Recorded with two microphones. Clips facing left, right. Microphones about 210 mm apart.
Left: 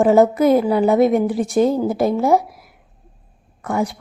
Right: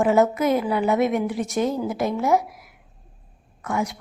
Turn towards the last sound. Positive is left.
turn(degrees=35)  # may be behind; listen again after turning